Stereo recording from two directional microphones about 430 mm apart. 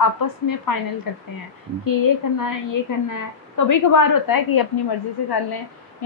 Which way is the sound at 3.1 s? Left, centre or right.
Left.